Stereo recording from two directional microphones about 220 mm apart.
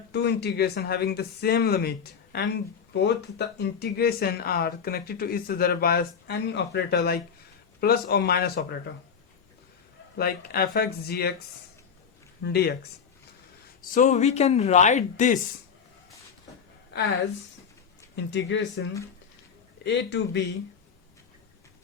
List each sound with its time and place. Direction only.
0.1 s speech: 50° left (ahead or behind)
10.2 s speech: 45° left (ahead or behind)
12.4 s speech: 45° left (ahead or behind)
13.9 s speech: 35° left (ahead or behind)
18.3 s speech: 55° left (ahead or behind)
19.8 s speech: 50° left (ahead or behind)